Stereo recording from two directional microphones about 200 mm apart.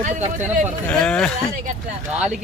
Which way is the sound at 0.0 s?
35° right (ahead or behind).